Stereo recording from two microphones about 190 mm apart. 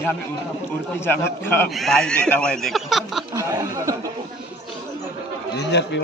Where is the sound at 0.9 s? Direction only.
10° left (ahead or behind).